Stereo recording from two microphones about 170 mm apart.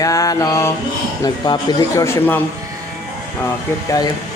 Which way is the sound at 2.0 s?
15° left (ahead or behind).